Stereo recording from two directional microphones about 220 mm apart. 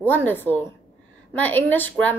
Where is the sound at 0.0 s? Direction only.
10° left (ahead or behind).